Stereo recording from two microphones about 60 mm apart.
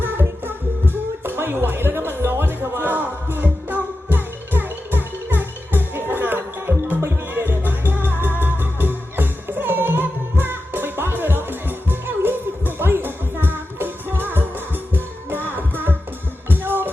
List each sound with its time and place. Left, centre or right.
0.0 s music: right